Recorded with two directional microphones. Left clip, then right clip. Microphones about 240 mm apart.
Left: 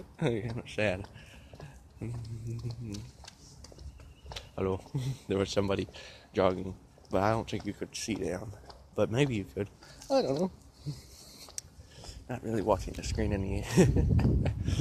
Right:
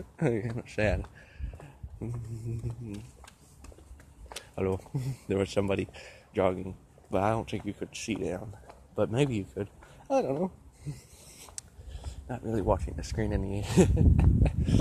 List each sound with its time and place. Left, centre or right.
0.2 s speech: right
0.7 s a sound: centre
2.9 s a sound: right
4.6 s speech: centre
6.4 s speech: centre
11.5 s speech: centre